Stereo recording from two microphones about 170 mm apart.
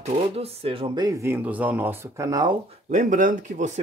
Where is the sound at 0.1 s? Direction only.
35° right (ahead or behind).